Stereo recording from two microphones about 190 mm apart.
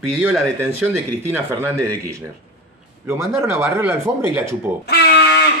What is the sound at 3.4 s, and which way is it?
Speech, 10° right (ahead or behind).